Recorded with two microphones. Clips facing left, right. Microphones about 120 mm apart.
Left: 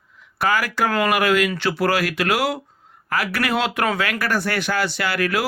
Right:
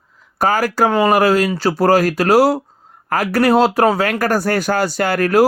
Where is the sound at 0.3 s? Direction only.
40° right (ahead or behind).